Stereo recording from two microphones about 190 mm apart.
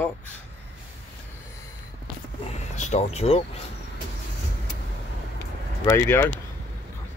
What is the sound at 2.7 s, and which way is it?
Speech, 35° left (ahead or behind).